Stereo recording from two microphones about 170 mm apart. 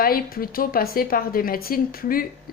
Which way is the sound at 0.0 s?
60° left (ahead or behind).